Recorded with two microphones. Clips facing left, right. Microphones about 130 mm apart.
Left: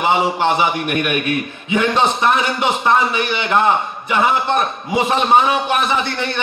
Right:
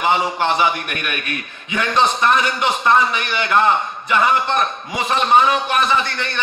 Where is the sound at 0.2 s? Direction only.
10° left (ahead or behind).